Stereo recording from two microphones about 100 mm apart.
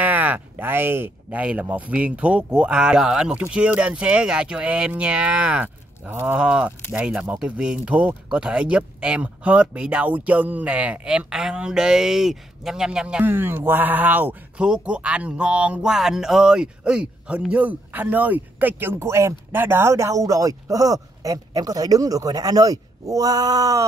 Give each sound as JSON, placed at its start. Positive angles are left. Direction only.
{"t": 0.0, "sound": "speech", "side_deg": -15}
{"t": 13.2, "sound": "a man's voice", "side_deg": -20}